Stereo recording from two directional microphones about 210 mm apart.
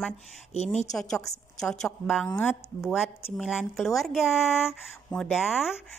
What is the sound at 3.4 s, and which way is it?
A woman's voice, centre (ahead or behind).